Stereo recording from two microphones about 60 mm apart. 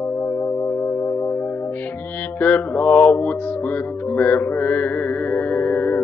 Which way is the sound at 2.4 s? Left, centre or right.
Left.